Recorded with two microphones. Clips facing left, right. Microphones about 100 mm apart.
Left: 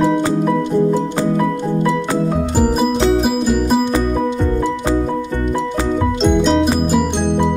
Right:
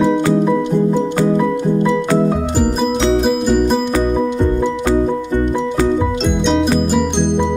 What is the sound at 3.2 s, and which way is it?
Music, centre (ahead or behind).